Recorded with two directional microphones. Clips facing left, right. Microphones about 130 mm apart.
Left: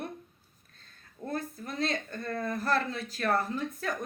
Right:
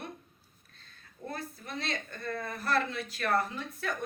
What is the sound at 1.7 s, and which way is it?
Speech, 40° left (ahead or behind).